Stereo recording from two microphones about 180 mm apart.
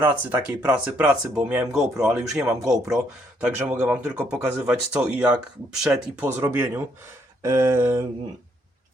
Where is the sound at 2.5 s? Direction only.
15° right (ahead or behind).